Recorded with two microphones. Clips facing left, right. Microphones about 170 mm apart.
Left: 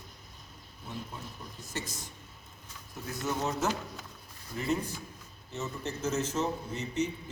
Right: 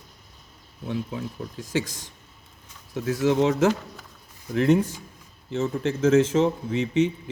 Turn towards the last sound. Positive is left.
turn(degrees=-90)